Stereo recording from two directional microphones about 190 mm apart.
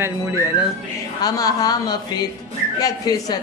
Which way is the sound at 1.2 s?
20° left (ahead or behind).